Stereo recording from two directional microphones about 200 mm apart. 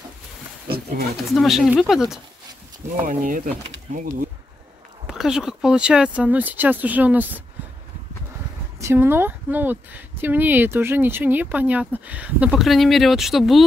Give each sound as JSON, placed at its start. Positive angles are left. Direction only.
{"t": 1.3, "sound": "speech", "side_deg": 0}
{"t": 3.1, "sound": "speech", "side_deg": -40}
{"t": 5.0, "sound": "speech", "side_deg": 0}
{"t": 8.7, "sound": "speech", "side_deg": -15}